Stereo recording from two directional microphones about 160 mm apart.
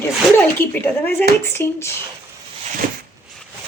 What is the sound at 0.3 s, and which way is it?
Speech, 10° left (ahead or behind).